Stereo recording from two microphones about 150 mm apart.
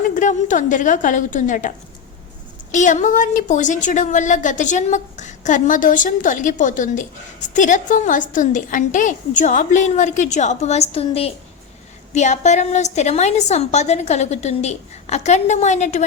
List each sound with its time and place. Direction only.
0.1 s a woman's voice: 55° left (ahead or behind)
2.7 s a woman's voice: 55° left (ahead or behind)
12.1 s a woman's voice: 50° left (ahead or behind)